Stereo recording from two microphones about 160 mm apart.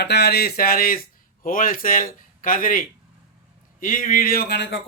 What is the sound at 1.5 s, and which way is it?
Speech, 60° left (ahead or behind).